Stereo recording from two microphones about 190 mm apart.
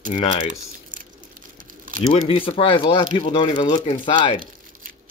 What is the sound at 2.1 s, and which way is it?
Speech, 30° left (ahead or behind).